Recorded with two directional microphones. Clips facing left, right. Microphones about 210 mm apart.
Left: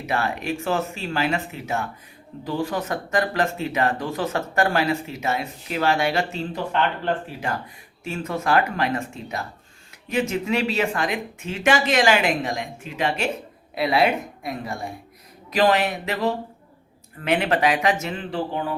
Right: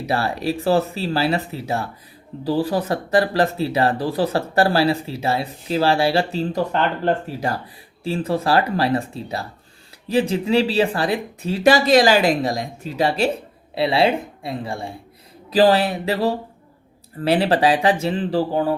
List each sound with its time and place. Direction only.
0.0 s a woman's voice: 35° right (ahead or behind)